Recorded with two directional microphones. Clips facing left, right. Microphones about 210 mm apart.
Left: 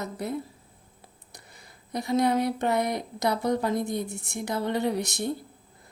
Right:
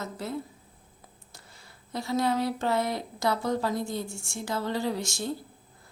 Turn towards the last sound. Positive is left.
turn(degrees=20)  # may be behind; listen again after turning